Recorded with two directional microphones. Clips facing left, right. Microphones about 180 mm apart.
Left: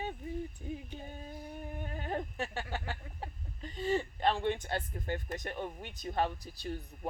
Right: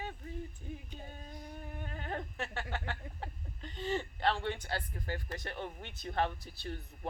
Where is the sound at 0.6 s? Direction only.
15° left (ahead or behind).